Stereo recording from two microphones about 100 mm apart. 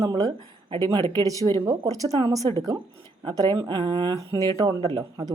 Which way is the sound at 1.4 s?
45° right (ahead or behind).